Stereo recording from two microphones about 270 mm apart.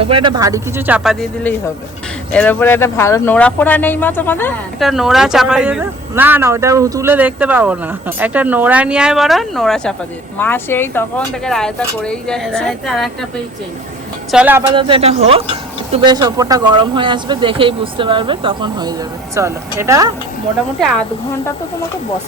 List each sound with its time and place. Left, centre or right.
0.0 s speech: centre
14.3 s speech: centre
14.8 s speech: centre